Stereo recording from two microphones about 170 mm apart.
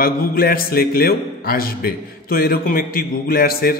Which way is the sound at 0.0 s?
60° left (ahead or behind).